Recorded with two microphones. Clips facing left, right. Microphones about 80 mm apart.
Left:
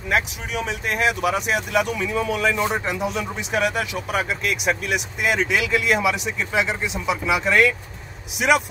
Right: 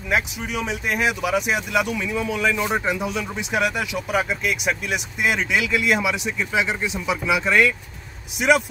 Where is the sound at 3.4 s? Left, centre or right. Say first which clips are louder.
Even; centre.